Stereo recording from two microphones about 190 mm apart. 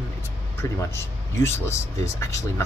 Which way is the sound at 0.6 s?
15° left (ahead or behind).